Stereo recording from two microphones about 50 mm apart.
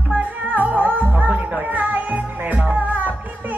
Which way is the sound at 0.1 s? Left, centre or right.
Right.